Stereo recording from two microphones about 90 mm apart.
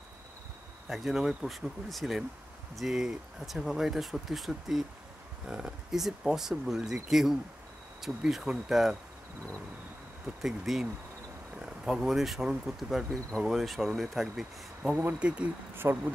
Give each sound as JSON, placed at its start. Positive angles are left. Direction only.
{"t": 0.8, "sound": "speech", "side_deg": 0}
{"t": 10.4, "sound": "speech", "side_deg": -5}
{"t": 15.1, "sound": "speech", "side_deg": -15}
{"t": 15.7, "sound": "speech", "side_deg": -25}